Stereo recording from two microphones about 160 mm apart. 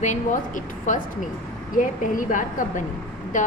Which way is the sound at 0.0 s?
50° left (ahead or behind).